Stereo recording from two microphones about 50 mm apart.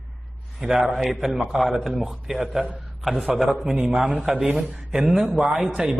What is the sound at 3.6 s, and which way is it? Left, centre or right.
A man's voice, centre.